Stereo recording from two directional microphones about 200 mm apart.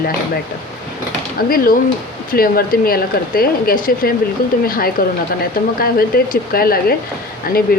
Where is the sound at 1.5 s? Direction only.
45° left (ahead or behind).